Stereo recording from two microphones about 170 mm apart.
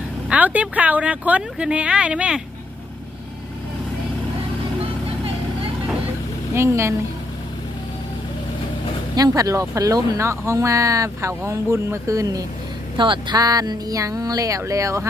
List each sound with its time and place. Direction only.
0.3 s speech: 10° right (ahead or behind)
6.5 s speech: 15° right (ahead or behind)
9.1 s speech: 20° right (ahead or behind)